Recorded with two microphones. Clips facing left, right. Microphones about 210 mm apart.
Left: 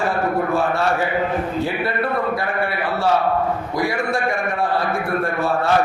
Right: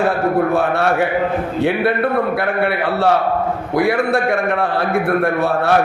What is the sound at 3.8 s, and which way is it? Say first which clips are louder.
A man's voice: right 7 dB; 60° right (ahead or behind).